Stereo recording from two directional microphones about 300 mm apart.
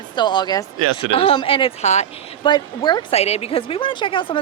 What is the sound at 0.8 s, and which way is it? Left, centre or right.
Speech, right.